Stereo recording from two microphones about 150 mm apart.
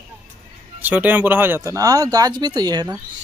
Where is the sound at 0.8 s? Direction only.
10° right (ahead or behind); by 3.0 s 25° right (ahead or behind).